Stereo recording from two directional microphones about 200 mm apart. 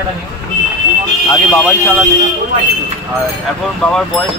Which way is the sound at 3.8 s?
5° left (ahead or behind).